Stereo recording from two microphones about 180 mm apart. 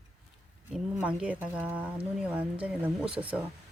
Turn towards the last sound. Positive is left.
turn(degrees=-5)  # may be behind; listen again after turning